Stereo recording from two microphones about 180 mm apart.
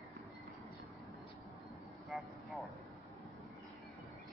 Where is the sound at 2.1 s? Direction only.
Centre (ahead or behind).